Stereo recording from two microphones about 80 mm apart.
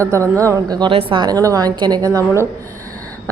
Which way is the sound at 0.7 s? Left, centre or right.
Right.